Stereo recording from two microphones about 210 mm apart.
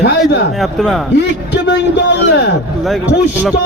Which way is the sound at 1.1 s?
55° left (ahead or behind).